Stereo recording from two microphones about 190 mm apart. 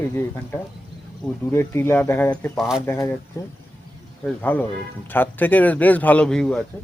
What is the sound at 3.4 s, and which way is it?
Speech, 15° left (ahead or behind).